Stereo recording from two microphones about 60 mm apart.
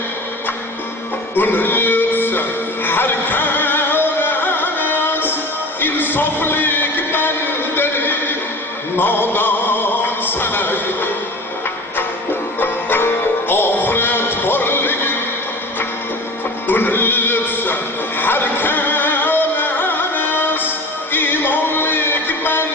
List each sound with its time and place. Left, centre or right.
1.4 s music: left
9.0 s a sound: left
12.5 s music: left
16.6 s music: left